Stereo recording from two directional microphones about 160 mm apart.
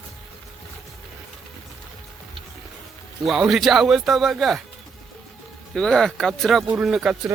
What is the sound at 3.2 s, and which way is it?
Speech, centre (ahead or behind).